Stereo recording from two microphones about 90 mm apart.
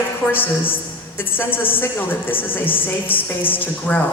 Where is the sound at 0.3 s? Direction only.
20° left (ahead or behind).